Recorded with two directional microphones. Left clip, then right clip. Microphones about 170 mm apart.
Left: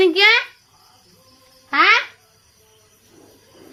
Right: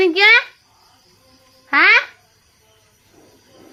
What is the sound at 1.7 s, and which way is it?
Speech, 15° right (ahead or behind).